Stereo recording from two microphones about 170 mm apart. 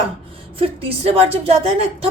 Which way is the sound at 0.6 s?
35° right (ahead or behind).